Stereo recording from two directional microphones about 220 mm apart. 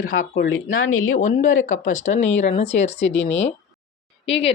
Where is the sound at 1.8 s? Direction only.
35° left (ahead or behind).